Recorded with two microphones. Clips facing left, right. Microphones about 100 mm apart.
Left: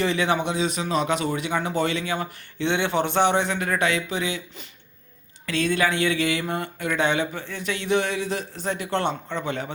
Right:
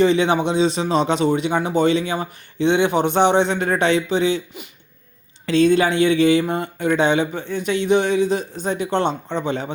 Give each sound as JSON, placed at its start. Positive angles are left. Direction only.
{"t": 0.0, "sound": "a man's voice", "side_deg": -20}
{"t": 5.5, "sound": "a man's voice", "side_deg": -25}